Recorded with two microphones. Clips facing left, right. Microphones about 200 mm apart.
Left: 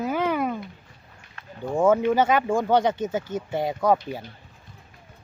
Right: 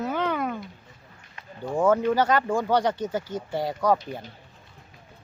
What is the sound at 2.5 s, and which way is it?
Speech, 20° left (ahead or behind).